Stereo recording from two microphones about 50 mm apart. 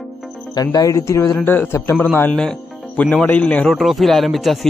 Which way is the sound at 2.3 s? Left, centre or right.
Centre.